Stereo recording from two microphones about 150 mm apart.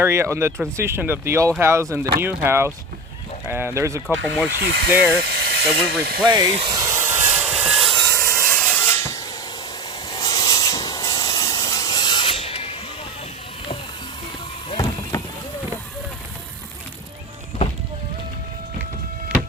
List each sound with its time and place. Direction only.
0.0 s speech: 15° right (ahead or behind)
4.5 s speech: 90° right
6.2 s speech: 30° right (ahead or behind)
6.7 s vehicle: 20° right (ahead or behind); by 8.0 s centre (ahead or behind)
8.0 s a sound: 20° left (ahead or behind)
8.5 s mechanisms: 10° left (ahead or behind)
10.1 s hiss: 25° left (ahead or behind); by 12.7 s 40° left (ahead or behind)
14.7 s a sound: 25° left (ahead or behind)